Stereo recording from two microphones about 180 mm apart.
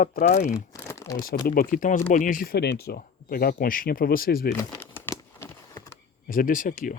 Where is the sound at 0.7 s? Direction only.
15° left (ahead or behind).